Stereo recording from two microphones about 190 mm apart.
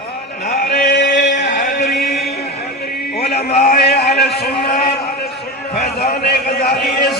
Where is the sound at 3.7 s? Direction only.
55° left (ahead or behind).